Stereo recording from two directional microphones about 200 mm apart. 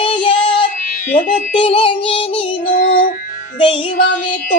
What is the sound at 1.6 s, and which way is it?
Child singing, 25° left (ahead or behind).